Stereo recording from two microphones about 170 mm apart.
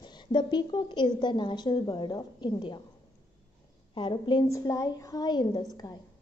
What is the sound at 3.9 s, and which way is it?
A woman's voice, 30° left (ahead or behind).